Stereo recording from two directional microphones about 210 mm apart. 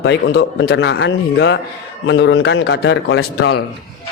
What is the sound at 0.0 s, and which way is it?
A woman's voice, 55° left (ahead or behind).